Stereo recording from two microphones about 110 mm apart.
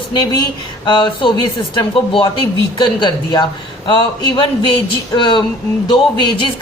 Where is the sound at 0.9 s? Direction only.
45° left (ahead or behind).